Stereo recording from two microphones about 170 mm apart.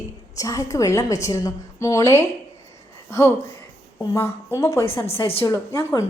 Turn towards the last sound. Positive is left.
turn(degrees=15)  # may be behind; listen again after turning